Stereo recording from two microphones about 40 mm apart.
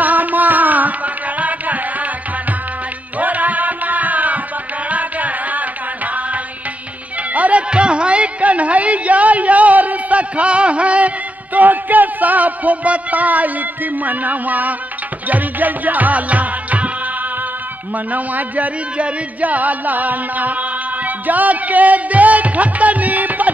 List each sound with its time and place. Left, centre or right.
0.0 s music: right
3.2 s music: right
7.3 s music: right
17.9 s music: right